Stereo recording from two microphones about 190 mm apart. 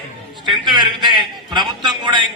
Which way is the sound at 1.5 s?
25° right (ahead or behind).